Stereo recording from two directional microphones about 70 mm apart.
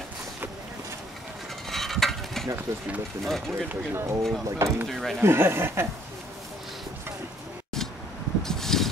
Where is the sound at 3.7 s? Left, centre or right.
Right.